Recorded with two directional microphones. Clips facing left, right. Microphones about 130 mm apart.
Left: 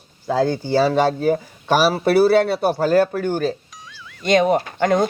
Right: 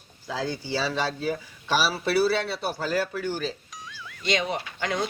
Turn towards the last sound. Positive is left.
turn(degrees=50)  # may be behind; listen again after turning